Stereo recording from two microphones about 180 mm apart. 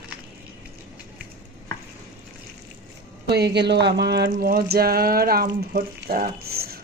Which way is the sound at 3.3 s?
65° right (ahead or behind).